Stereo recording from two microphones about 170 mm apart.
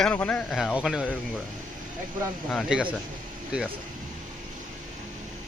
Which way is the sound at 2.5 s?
Centre (ahead or behind).